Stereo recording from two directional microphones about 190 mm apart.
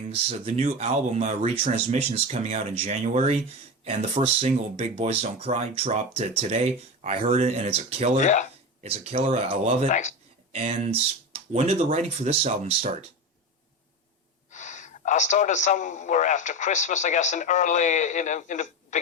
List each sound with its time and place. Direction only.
0.3 s speech: 35° right (ahead or behind)
8.2 s a man's voice: 40° left (ahead or behind)
8.8 s speech: 35° right (ahead or behind)
9.9 s a man's voice: 40° left (ahead or behind)
10.5 s speech: 30° right (ahead or behind)
14.5 s a man's voice: 40° left (ahead or behind)